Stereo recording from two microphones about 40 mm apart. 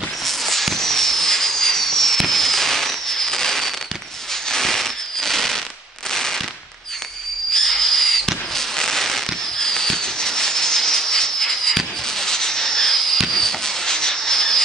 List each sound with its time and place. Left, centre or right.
0.2 s fireworks: centre
4.5 s a sound: centre
6.1 s fireworks: centre
7.5 s fireworks: centre
12.3 s rub: centre